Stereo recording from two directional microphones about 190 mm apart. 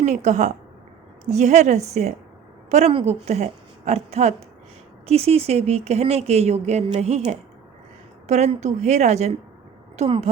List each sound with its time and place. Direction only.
0.0 s a woman's voice: 40° right (ahead or behind)
8.3 s speech: 35° right (ahead or behind)